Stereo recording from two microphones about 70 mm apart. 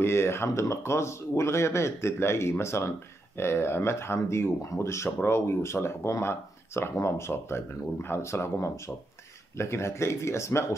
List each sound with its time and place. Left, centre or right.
0.0 s speech: left